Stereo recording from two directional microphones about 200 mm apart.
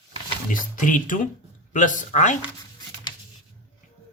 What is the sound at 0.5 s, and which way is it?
Speech, 40° left (ahead or behind).